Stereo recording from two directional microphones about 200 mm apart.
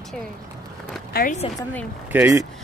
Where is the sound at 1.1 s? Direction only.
50° left (ahead or behind).